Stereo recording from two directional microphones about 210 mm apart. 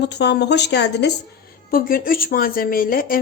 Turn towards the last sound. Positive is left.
turn(degrees=40)  # may be behind; listen again after turning